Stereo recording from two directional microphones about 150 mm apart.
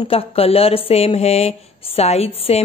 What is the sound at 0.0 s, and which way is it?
Speech, 40° left (ahead or behind).